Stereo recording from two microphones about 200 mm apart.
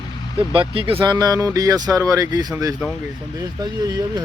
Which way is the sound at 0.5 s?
25° right (ahead or behind).